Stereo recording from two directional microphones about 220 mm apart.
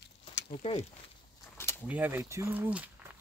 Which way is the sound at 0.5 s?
30° left (ahead or behind).